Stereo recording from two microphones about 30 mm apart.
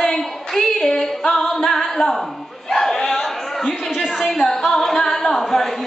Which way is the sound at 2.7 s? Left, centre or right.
Centre.